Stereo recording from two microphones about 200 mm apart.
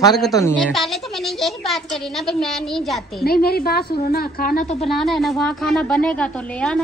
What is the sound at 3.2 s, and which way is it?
A woman's voice, 50° left (ahead or behind).